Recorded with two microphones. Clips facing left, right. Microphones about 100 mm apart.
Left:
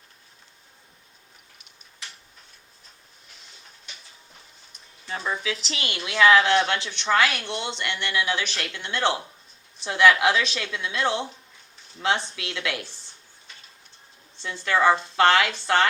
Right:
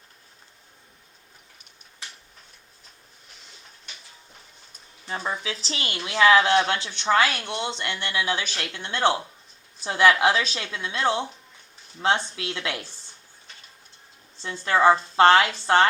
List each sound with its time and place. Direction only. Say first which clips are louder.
5.0 s speech: left 1 dB; 30° right (ahead or behind)
14.4 s a woman's voice: right 2 dB; 30° right (ahead or behind)